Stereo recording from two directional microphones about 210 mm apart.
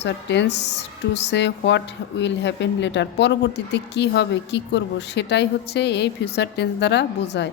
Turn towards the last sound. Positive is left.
turn(degrees=55)  # may be behind; listen again after turning